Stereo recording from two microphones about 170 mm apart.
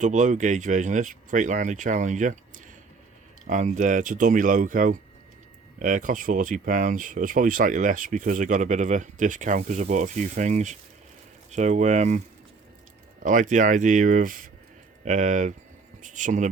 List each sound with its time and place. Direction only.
0.0 s speech: 45° right (ahead or behind)
3.4 s speech: 45° right (ahead or behind)
13.2 s speech: 45° right (ahead or behind)